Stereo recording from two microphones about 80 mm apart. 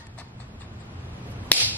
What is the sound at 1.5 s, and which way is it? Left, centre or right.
Whip, centre.